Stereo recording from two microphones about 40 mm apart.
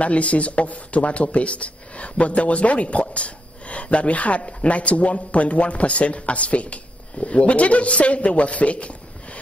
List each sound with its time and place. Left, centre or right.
0.0 s speech: left